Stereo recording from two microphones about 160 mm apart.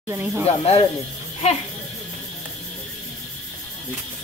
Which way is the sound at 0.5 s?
40° left (ahead or behind).